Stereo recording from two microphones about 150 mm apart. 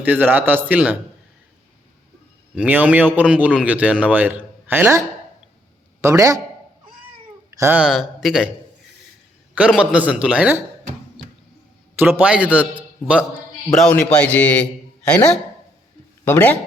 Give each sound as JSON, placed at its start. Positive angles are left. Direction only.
{"t": 0.0, "sound": "speech", "side_deg": -10}
{"t": 2.6, "sound": "a man's voice", "side_deg": -10}
{"t": 7.5, "sound": "hiccup", "side_deg": -20}
{"t": 7.8, "sound": "speech", "side_deg": -5}
{"t": 9.6, "sound": "speech", "side_deg": -5}
{"t": 11.9, "sound": "speech", "side_deg": -15}
{"t": 13.7, "sound": "a man's voice", "side_deg": 5}
{"t": 16.2, "sound": "speech", "side_deg": 15}